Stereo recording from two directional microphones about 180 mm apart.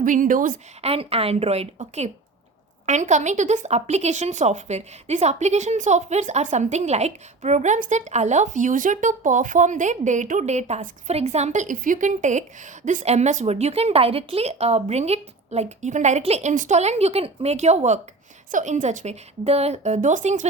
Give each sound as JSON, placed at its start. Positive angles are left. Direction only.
{"t": 0.0, "sound": "a woman's voice", "side_deg": -45}
{"t": 0.8, "sound": "a woman's voice", "side_deg": -35}